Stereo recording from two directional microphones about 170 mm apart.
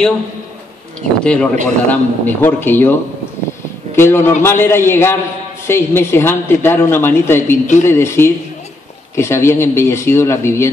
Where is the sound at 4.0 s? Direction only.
15° left (ahead or behind).